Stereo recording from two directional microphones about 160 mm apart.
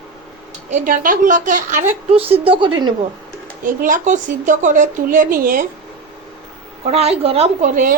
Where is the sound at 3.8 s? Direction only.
50° right (ahead or behind).